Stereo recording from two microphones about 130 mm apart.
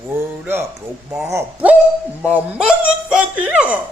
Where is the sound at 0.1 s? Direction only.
15° right (ahead or behind).